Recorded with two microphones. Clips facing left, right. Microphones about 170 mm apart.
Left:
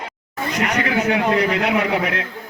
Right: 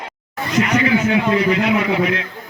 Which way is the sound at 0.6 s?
65° left (ahead or behind).